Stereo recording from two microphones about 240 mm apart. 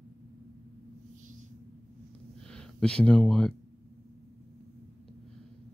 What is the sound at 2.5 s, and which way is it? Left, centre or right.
Speech, centre.